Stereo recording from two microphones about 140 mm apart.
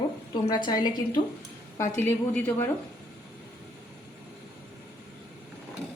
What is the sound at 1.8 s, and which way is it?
Speech, 15° left (ahead or behind).